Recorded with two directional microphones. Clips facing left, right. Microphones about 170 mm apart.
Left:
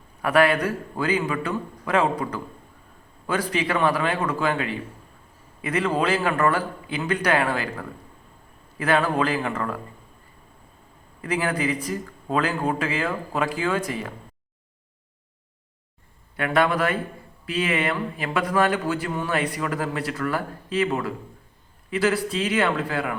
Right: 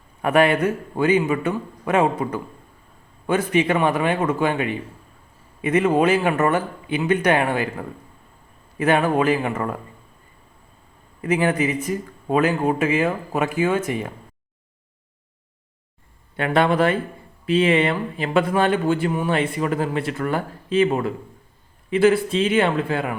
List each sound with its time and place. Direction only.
0.2 s speech: 25° right (ahead or behind)
11.2 s speech: 25° right (ahead or behind)
16.4 s speech: 25° right (ahead or behind)